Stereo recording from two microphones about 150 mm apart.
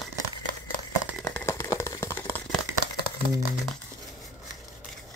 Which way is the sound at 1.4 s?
20° left (ahead or behind).